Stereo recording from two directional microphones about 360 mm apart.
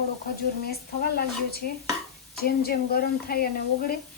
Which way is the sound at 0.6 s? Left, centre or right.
Left.